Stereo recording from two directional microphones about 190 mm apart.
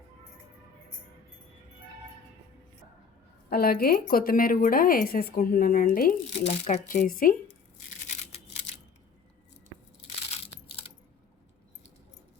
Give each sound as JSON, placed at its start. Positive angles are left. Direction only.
{"t": 3.5, "sound": "speech", "side_deg": 50}
{"t": 10.3, "sound": "crushing", "side_deg": 30}